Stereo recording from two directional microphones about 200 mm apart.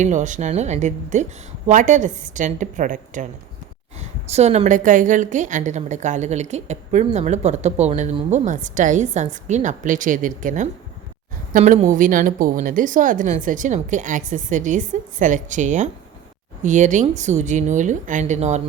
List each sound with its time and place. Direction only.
0.0 s a woman's voice: 35° right (ahead or behind)
4.3 s a woman's voice: 35° right (ahead or behind)